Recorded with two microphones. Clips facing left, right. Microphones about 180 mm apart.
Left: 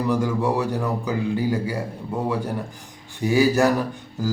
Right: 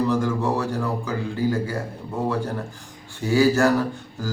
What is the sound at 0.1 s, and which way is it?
Mantra, 10° left (ahead or behind).